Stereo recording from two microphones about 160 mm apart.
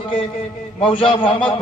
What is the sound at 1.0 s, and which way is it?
Speech, 35° left (ahead or behind).